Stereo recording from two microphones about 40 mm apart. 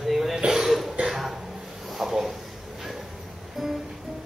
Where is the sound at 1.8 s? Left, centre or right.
Centre.